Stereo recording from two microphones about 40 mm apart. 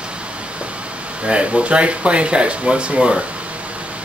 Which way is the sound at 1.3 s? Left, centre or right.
Right.